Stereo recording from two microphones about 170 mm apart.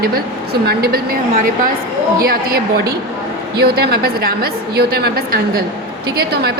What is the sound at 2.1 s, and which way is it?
Speech, 60° right (ahead or behind).